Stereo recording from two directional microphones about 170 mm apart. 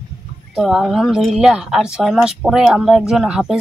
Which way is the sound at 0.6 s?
Centre (ahead or behind).